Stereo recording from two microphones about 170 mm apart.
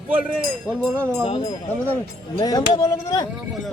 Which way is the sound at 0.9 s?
15° right (ahead or behind).